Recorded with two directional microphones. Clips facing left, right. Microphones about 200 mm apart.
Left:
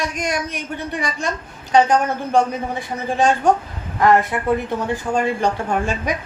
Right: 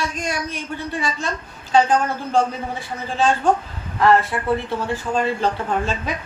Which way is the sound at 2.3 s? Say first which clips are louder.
Left 2 dB; 15° left (ahead or behind).